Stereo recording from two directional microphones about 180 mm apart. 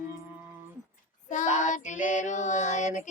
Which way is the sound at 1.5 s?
40° left (ahead or behind).